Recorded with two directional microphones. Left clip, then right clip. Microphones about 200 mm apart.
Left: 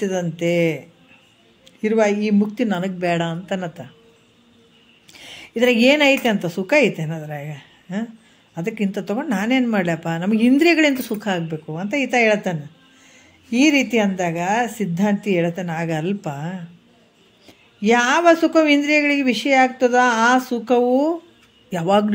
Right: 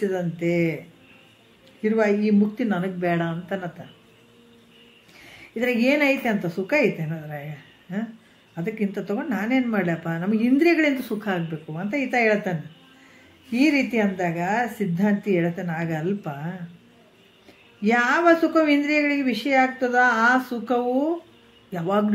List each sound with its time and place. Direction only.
0.0 s speech: 40° left (ahead or behind)
1.8 s speech: 40° left (ahead or behind)
5.2 s a woman's voice: 45° left (ahead or behind)
17.8 s a man's voice: 40° left (ahead or behind)